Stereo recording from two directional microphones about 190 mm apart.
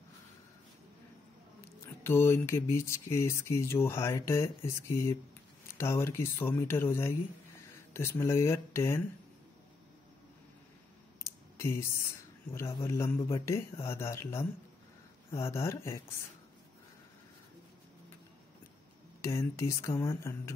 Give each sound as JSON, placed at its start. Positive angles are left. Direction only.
{"t": 1.6, "sound": "speech", "side_deg": 15}
{"t": 11.2, "sound": "clicking", "side_deg": 15}
{"t": 12.5, "sound": "speech", "side_deg": 15}
{"t": 19.2, "sound": "speech", "side_deg": 15}